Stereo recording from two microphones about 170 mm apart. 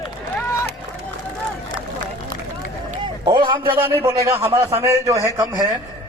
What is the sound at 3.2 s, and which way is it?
Speech, 30° right (ahead or behind).